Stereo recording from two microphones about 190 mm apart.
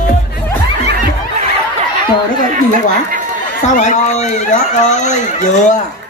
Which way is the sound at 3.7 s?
40° left (ahead or behind).